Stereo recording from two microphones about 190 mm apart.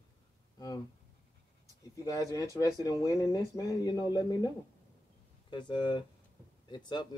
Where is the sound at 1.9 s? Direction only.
15° left (ahead or behind).